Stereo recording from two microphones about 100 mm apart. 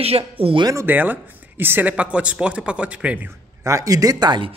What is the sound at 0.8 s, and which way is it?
Speech, 20° right (ahead or behind).